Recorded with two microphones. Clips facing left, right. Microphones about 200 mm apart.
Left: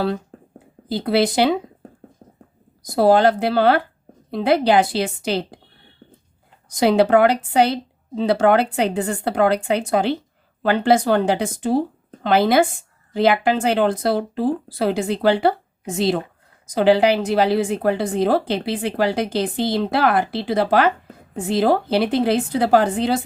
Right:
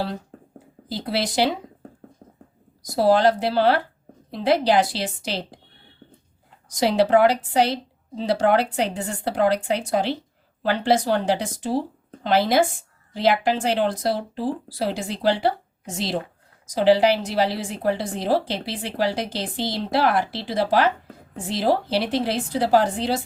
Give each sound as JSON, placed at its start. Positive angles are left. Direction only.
{"t": 0.9, "sound": "a woman's voice", "side_deg": 55}
{"t": 2.8, "sound": "a woman's voice", "side_deg": 55}
{"t": 6.7, "sound": "a woman's voice", "side_deg": 55}
{"t": 16.6, "sound": "a woman's voice", "side_deg": 55}